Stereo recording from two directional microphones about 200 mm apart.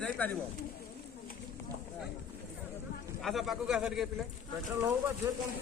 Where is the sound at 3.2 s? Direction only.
Centre (ahead or behind).